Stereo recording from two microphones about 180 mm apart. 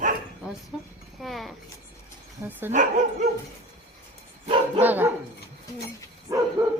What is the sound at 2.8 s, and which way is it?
Speech, 45° right (ahead or behind).